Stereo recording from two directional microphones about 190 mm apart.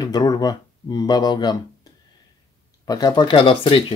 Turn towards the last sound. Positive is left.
turn(degrees=30)  # may be behind; listen again after turning